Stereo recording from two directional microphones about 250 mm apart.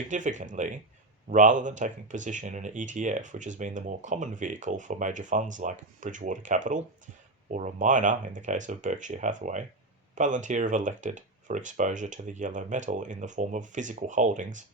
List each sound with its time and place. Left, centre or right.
0.1 s speech: right